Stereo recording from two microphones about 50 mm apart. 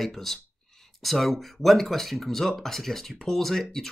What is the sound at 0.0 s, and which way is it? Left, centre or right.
Speech, centre.